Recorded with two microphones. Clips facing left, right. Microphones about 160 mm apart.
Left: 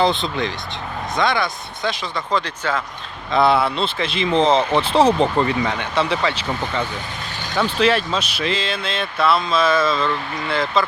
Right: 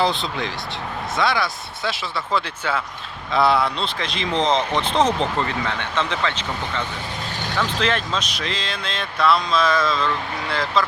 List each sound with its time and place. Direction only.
0.0 s speech: centre (ahead or behind)